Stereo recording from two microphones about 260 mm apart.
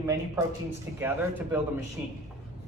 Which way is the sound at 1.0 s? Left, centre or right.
Centre.